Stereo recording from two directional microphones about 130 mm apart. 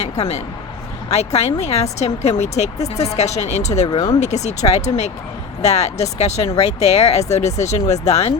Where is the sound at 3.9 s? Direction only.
30° left (ahead or behind).